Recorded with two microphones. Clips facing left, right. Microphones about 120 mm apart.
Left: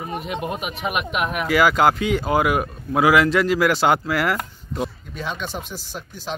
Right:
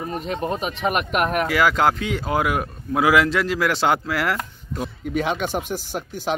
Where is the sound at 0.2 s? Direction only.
35° right (ahead or behind).